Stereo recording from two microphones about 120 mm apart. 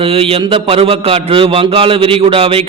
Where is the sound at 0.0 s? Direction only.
55° right (ahead or behind).